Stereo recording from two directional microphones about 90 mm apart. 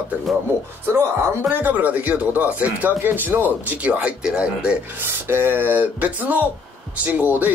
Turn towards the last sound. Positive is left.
turn(degrees=-20)  # may be behind; listen again after turning